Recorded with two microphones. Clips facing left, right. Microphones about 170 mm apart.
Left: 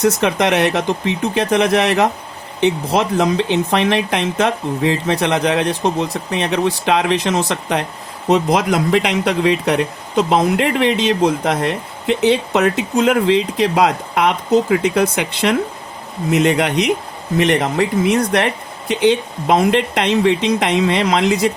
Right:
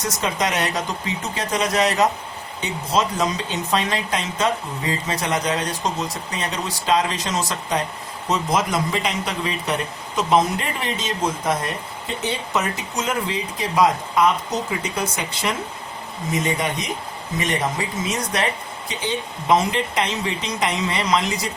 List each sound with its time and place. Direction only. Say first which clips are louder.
0.0 s speech: left 8 dB; 65° left (ahead or behind)